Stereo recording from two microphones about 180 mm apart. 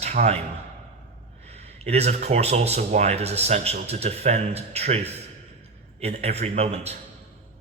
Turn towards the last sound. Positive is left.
turn(degrees=-35)  # may be behind; listen again after turning